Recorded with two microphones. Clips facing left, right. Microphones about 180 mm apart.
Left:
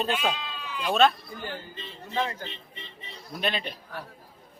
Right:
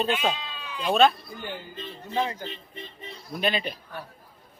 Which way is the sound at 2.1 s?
15° right (ahead or behind).